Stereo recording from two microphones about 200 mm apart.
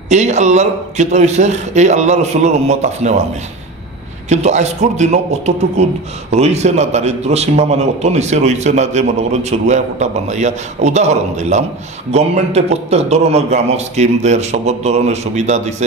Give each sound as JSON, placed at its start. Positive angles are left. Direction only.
{"t": 0.1, "sound": "a man's voice", "side_deg": -35}
{"t": 4.3, "sound": "a man's voice", "side_deg": -35}